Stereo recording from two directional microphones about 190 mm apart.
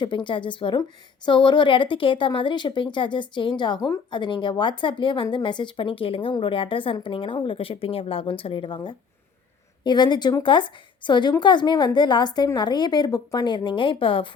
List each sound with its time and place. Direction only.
0.0 s a woman's voice: 25° left (ahead or behind)